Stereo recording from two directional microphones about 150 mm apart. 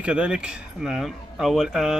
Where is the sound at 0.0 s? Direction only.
5° right (ahead or behind).